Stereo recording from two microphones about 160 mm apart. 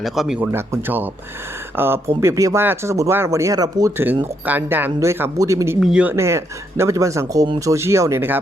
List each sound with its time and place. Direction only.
0.0 s speech: centre (ahead or behind); by 5.7 s 20° right (ahead or behind)
5.8 s speech: 5° right (ahead or behind)